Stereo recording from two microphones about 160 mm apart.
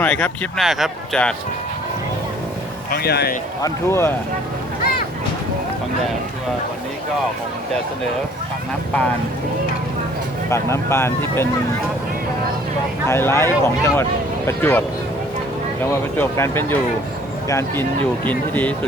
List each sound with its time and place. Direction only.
0.0 s speech: 5° left (ahead or behind)
2.9 s speech: 80° left
3.6 s speech: 15° left (ahead or behind)
10.5 s speech: 15° left (ahead or behind)
13.1 s speech: 15° left (ahead or behind)
15.9 s speech: 15° left (ahead or behind)